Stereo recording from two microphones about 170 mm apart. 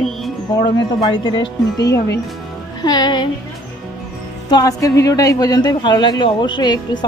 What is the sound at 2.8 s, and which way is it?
Speech, 25° left (ahead or behind).